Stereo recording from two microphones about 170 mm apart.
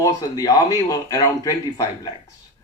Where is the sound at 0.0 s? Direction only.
20° left (ahead or behind).